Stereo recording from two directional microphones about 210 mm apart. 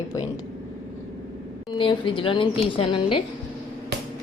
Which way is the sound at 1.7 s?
25° left (ahead or behind).